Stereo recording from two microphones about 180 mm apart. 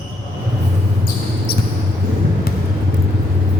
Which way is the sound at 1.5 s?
60° left (ahead or behind).